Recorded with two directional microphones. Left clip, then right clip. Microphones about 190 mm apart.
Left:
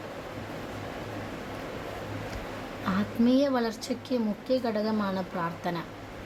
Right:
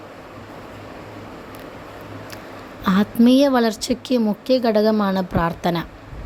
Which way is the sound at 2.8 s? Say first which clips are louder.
Right 10 dB; 45° right (ahead or behind).